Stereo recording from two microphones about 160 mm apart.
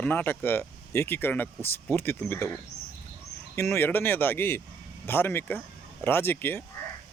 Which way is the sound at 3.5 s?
15° left (ahead or behind).